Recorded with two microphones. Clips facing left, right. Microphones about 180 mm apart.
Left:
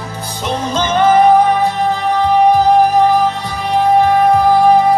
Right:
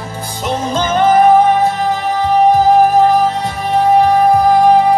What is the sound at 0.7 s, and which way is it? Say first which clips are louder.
Music: even; centre (ahead or behind).